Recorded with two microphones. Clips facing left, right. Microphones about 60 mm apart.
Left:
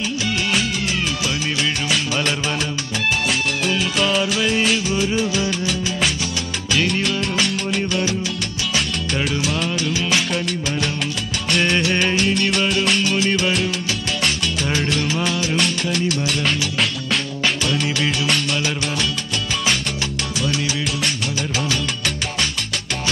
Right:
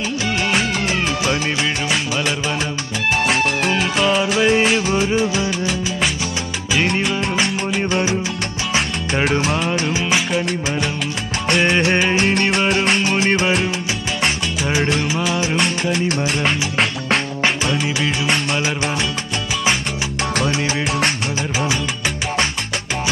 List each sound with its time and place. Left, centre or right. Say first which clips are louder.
1.9 s music: right 1 dB; centre
3.3 s music: right 3 dB; right
3.9 s music: right 3 dB; centre
4.7 s music: right 3 dB; right
5.1 s music: right 3 dB; right
7.0 s music: right 2 dB; centre
10.1 s music: right 2 dB; centre
12.6 s music: right 2 dB; right
12.9 s music: right 2 dB; right
14.7 s music: right 4 dB; centre